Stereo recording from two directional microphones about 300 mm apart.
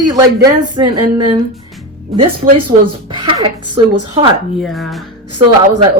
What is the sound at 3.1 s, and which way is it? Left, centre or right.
Speech, centre.